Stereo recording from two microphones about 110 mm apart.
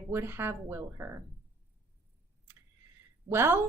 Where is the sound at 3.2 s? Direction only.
20° right (ahead or behind).